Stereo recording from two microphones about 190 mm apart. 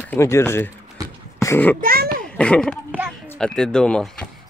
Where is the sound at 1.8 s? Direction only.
50° right (ahead or behind).